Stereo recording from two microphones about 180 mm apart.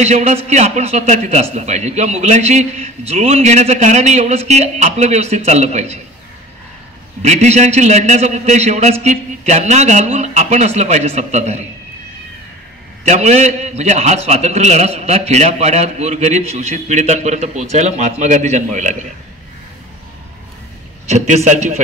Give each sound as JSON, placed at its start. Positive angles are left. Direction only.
{"t": 0.0, "sound": "a man's voice", "side_deg": -40}
{"t": 7.2, "sound": "a man's voice", "side_deg": -40}
{"t": 13.0, "sound": "a man's voice", "side_deg": -40}
{"t": 21.5, "sound": "a man's voice", "side_deg": -40}